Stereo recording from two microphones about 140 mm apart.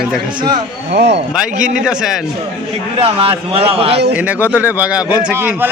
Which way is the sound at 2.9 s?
45° right (ahead or behind).